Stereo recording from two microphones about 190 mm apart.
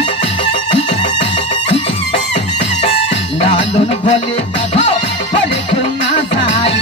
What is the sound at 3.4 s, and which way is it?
Music, 35° left (ahead or behind).